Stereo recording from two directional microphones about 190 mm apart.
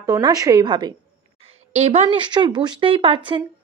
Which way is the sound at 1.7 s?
35° right (ahead or behind).